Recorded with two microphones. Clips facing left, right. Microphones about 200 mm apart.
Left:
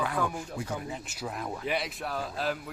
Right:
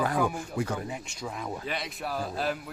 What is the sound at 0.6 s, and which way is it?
Speech, 65° right (ahead or behind).